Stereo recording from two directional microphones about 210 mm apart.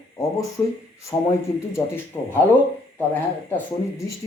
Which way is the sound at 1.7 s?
10° left (ahead or behind).